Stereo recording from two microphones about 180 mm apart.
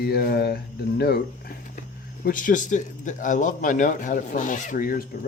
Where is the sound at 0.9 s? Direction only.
60° left (ahead or behind).